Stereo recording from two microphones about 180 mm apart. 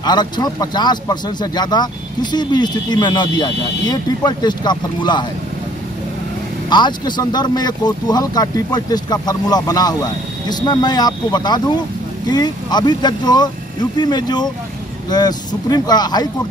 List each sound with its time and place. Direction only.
0.0 s speech: 25° left (ahead or behind)
6.7 s speech: 25° left (ahead or behind)